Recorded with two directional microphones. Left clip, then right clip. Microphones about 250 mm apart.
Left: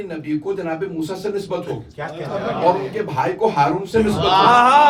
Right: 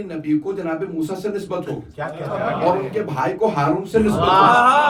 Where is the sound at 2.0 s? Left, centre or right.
Right.